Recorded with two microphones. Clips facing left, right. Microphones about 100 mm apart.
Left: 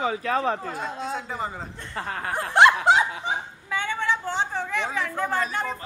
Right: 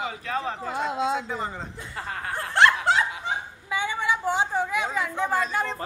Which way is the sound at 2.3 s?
15° left (ahead or behind).